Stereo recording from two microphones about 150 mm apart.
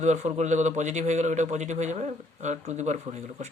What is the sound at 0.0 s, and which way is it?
A man's voice, 50° right (ahead or behind).